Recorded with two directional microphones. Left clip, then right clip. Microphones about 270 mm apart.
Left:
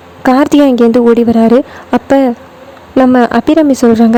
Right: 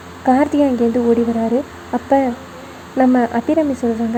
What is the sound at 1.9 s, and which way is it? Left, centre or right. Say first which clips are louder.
Speech: left 7 dB; left.